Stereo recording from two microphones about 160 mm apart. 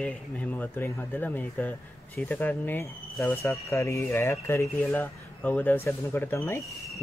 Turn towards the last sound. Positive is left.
turn(degrees=0)  # may be behind; listen again after turning